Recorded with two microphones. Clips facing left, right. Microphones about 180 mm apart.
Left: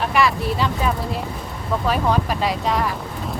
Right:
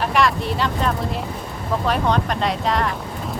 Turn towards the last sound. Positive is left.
turn(degrees=0)  # may be behind; listen again after turning